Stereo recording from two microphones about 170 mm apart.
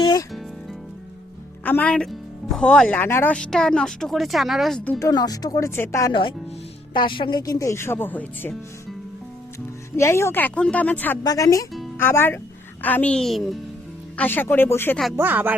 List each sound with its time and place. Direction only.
0.0 s music: 25° left (ahead or behind)
0.3 s music: centre (ahead or behind)
1.6 s speech: 10° left (ahead or behind)
5.0 s speech: 20° left (ahead or behind)
6.9 s speech: 30° left (ahead or behind); by 8.5 s 10° left (ahead or behind)
9.9 s speech: 15° left (ahead or behind)
11.2 s speech: 20° left (ahead or behind); by 13.6 s centre (ahead or behind)
14.2 s speech: 10° left (ahead or behind)
15.1 s speech: 10° right (ahead or behind)